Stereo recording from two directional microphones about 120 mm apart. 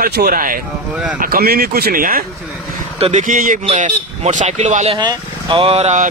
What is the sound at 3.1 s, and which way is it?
Speech, 90° right.